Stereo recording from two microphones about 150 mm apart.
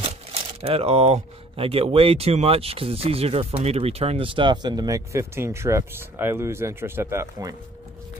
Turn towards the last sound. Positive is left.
turn(degrees=-20)  # may be behind; listen again after turning